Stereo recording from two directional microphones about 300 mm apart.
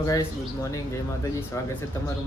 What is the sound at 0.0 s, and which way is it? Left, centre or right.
Speech, centre.